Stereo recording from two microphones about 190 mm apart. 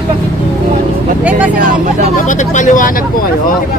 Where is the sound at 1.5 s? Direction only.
45° right (ahead or behind).